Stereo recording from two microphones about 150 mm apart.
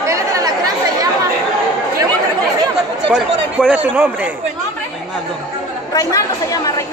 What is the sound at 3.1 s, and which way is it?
Speech, 5° right (ahead or behind).